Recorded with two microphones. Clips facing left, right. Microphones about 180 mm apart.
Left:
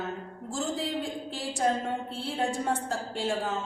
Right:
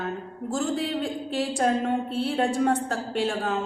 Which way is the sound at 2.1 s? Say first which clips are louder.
Right 6 dB; 60° right (ahead or behind).